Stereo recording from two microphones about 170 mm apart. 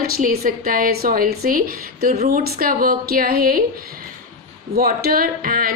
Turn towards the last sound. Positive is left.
turn(degrees=-55)  # may be behind; listen again after turning